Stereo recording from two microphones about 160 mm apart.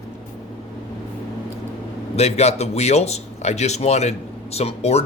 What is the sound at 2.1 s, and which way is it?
Speech, 40° left (ahead or behind).